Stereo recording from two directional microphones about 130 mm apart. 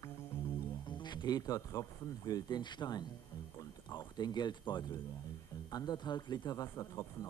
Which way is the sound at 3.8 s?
35° left (ahead or behind).